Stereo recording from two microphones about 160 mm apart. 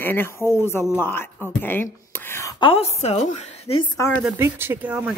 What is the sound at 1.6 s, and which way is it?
Whispering, 15° left (ahead or behind).